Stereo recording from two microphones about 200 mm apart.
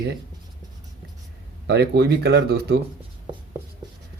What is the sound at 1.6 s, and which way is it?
Speech, 55° right (ahead or behind).